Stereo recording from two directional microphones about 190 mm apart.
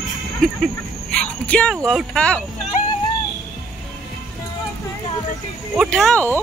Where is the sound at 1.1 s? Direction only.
5° left (ahead or behind).